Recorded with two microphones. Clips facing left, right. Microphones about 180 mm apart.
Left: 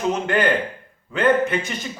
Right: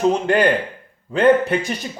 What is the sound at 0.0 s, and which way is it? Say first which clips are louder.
Speech: right 4 dB; 35° right (ahead or behind).